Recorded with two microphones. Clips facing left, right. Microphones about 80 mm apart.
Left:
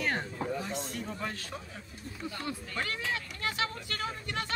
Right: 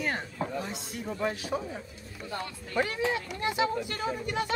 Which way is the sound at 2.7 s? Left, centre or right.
Right.